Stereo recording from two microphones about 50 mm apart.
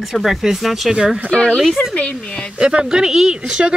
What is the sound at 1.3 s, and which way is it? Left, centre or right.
Speech, centre.